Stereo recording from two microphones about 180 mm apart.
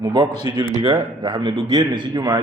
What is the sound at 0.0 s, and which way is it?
A man's voice, 25° right (ahead or behind).